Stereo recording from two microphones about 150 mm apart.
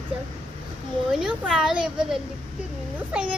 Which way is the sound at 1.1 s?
5° right (ahead or behind).